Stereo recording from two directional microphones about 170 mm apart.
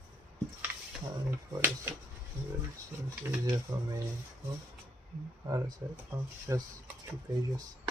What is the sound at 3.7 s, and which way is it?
Speech, 15° right (ahead or behind).